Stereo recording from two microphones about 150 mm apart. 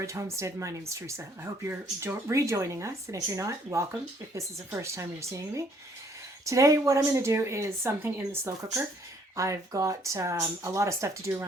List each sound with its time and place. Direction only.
0.0 s speech: 20° right (ahead or behind)